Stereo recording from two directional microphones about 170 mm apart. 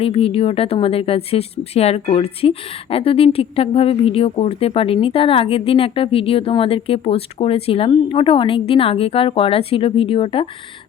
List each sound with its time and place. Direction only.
0.0 s speech: 35° left (ahead or behind)